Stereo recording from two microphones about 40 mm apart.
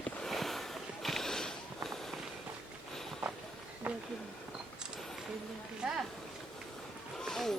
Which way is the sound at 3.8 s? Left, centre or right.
Right.